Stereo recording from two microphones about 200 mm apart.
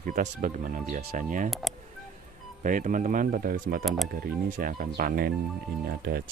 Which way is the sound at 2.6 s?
40° right (ahead or behind).